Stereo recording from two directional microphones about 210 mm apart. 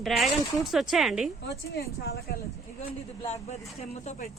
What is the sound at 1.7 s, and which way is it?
Speech, 50° left (ahead or behind).